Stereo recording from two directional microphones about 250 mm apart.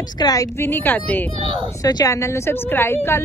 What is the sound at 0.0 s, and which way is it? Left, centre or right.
A woman's voice, centre.